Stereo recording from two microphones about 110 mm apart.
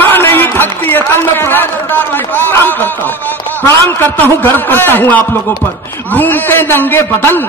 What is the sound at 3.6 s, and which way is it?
A man's voice, 20° left (ahead or behind).